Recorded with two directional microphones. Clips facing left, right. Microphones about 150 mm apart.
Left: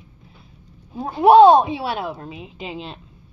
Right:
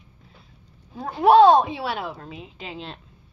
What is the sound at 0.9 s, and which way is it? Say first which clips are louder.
A woman's voice: left 4 dB; 10° left (ahead or behind).